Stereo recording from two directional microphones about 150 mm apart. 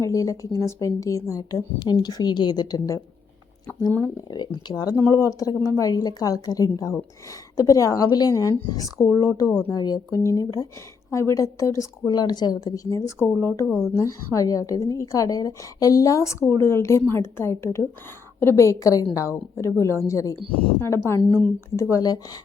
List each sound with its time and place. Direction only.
0.0 s speech: 20° left (ahead or behind)
4.0 s speech: 25° left (ahead or behind)
13.7 s speech: 5° right (ahead or behind)
13.9 s a woman's voice: 20° left (ahead or behind)